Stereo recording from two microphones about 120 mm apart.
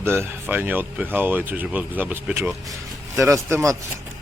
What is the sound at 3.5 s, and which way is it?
Speech, 25° right (ahead or behind).